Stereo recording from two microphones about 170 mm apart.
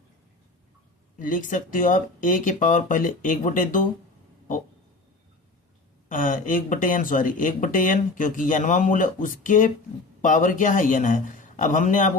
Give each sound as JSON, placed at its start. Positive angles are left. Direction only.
{"t": 1.2, "sound": "speech", "side_deg": 50}
{"t": 6.1, "sound": "speech", "side_deg": 50}